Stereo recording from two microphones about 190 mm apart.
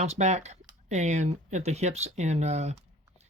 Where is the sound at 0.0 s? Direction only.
35° right (ahead or behind).